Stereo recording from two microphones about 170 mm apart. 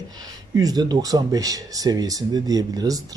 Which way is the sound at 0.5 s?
20° right (ahead or behind).